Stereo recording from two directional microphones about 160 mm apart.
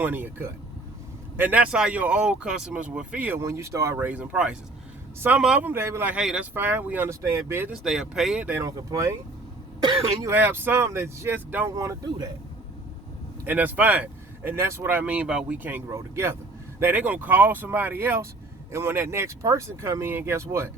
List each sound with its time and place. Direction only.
0.0 s speech: 15° right (ahead or behind)
7.9 s speech: 5° right (ahead or behind); by 10.2 s 30° right (ahead or behind)
10.2 s speech: 10° right (ahead or behind)
13.4 s speech: 10° right (ahead or behind)